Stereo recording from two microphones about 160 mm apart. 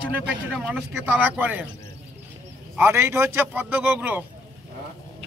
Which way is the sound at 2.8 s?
15° right (ahead or behind).